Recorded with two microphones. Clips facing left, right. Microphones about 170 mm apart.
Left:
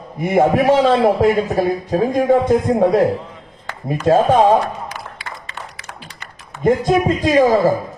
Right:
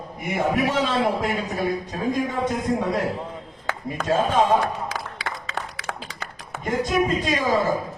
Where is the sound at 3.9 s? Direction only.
60° left (ahead or behind).